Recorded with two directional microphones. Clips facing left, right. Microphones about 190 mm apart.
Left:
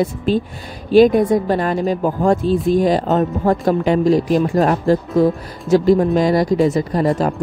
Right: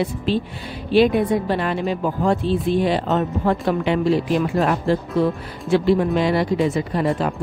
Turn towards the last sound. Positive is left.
turn(degrees=40)  # may be behind; listen again after turning